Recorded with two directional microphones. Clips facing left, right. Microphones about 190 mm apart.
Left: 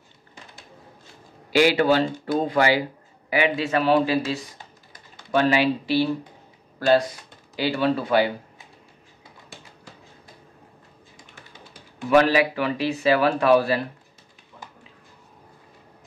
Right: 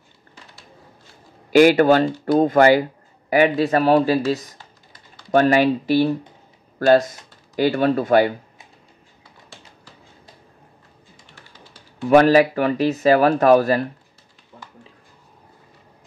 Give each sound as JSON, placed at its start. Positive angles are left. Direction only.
{"t": 1.5, "sound": "speech", "side_deg": -50}
{"t": 12.1, "sound": "speech", "side_deg": -45}